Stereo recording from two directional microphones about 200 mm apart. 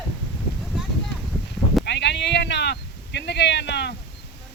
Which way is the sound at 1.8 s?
60° left (ahead or behind).